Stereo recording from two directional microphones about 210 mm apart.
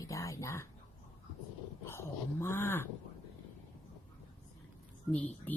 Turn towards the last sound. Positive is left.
turn(degrees=10)  # may be behind; listen again after turning